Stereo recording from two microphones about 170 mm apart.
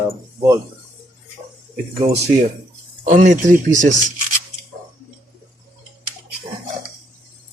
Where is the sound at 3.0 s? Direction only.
45° right (ahead or behind).